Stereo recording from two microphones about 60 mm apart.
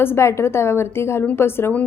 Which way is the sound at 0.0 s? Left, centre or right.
Left.